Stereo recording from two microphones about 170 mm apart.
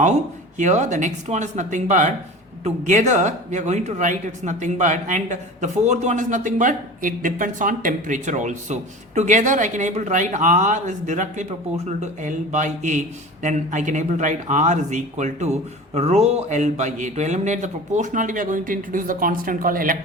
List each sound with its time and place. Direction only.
0.6 s speech: 45° right (ahead or behind)